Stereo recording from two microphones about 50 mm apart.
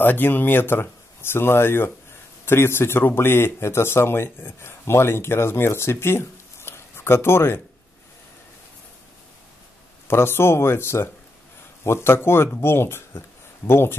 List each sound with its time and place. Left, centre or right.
0.0 s speech: left
10.0 s speech: left